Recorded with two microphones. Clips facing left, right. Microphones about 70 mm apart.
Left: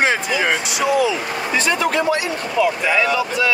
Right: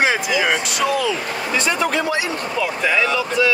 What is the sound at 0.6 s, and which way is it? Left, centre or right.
Speech, centre.